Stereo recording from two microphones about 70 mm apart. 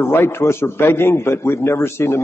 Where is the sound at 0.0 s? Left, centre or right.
Left.